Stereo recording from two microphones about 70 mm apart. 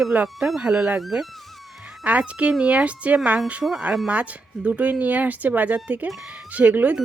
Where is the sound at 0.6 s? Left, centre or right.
Centre.